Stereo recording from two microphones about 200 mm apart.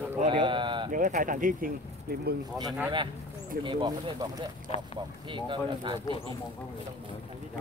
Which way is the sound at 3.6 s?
25° right (ahead or behind).